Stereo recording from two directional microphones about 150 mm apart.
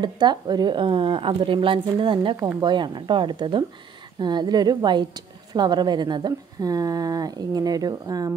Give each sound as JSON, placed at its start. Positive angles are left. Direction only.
{"t": 0.0, "sound": "a woman's voice", "side_deg": -30}